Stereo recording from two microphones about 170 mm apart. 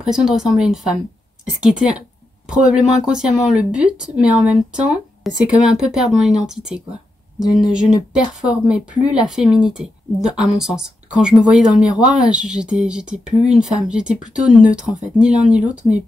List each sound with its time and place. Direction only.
0.0 s speech: 5° right (ahead or behind)